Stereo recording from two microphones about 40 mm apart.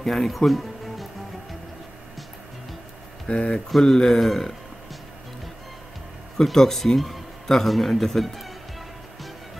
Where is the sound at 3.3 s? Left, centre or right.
Left.